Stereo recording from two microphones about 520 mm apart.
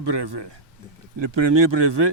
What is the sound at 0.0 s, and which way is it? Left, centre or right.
A man's voice, right.